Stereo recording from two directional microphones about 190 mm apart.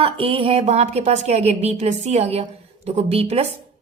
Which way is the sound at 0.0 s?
30° right (ahead or behind).